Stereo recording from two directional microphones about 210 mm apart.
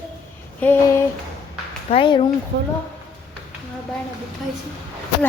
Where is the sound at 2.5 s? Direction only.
60° right (ahead or behind).